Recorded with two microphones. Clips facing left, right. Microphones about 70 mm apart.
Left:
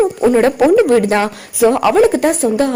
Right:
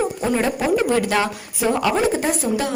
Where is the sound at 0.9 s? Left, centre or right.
Left.